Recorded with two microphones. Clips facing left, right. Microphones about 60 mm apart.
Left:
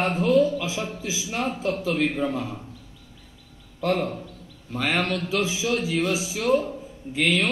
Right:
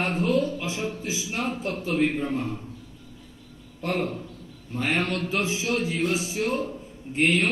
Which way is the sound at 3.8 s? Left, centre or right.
Left.